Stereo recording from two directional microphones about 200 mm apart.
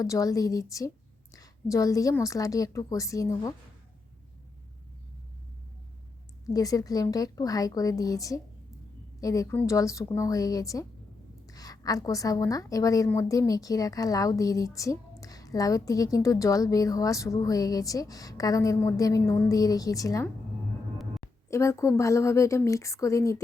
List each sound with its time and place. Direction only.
0.0 s a woman's voice: 15° left (ahead or behind)
6.4 s a woman's voice: 15° left (ahead or behind)
21.5 s a woman's voice: 15° left (ahead or behind)